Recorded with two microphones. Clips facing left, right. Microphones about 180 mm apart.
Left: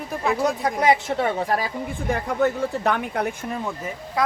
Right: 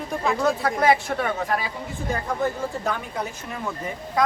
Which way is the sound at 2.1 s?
65° left (ahead or behind).